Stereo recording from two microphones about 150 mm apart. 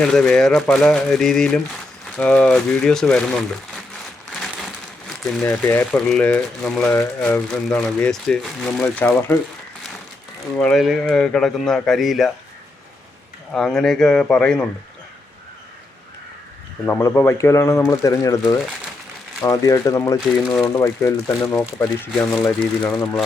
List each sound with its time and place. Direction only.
0.0 s speech: 5° left (ahead or behind)
5.0 s a sound: centre (ahead or behind)
5.4 s speech: 15° left (ahead or behind)
10.6 s speech: 5° left (ahead or behind)
13.5 s speech: 5° left (ahead or behind)
16.8 s speech: 15° left (ahead or behind)
22.6 s speech: 5° left (ahead or behind)